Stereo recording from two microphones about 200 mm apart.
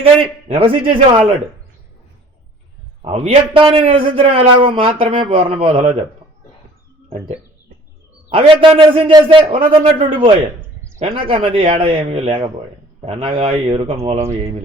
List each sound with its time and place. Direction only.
0.0 s a man's voice: 30° right (ahead or behind)
3.0 s a man's voice: 30° right (ahead or behind)
8.3 s a man's voice: 25° right (ahead or behind)